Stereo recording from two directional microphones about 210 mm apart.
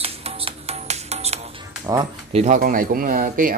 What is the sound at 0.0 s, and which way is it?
Music, 25° right (ahead or behind).